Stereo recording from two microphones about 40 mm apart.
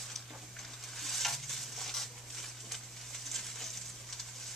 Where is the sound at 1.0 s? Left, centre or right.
Centre.